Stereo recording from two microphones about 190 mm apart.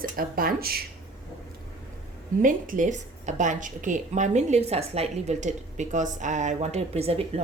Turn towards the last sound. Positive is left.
turn(degrees=-30)  # may be behind; listen again after turning